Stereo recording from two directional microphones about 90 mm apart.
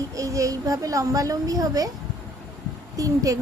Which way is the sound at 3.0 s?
40° right (ahead or behind).